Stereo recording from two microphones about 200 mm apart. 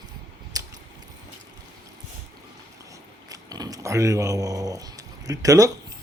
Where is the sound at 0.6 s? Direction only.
20° right (ahead or behind).